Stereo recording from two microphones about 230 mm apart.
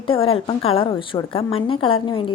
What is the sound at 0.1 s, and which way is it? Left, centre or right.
A woman's voice, left.